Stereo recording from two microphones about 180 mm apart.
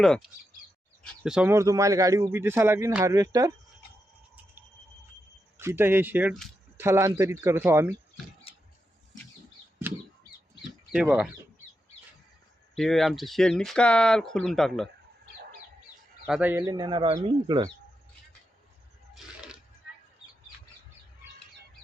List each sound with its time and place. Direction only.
0.0 s speech: 5° left (ahead or behind); by 3.5 s 20° right (ahead or behind)
5.5 s speech: 10° right (ahead or behind)
8.5 s scissors: 30° left (ahead or behind)
10.9 s speech: 5° right (ahead or behind)
12.7 s speech: centre (ahead or behind)
16.2 s speech: 5° right (ahead or behind)
16.7 s speech: 25° right (ahead or behind)
19.1 s a sound: 5° right (ahead or behind)